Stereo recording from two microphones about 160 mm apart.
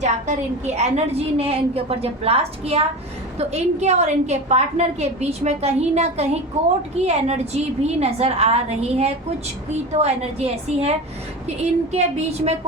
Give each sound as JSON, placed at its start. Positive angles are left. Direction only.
{"t": 0.0, "sound": "a woman's voice", "side_deg": -45}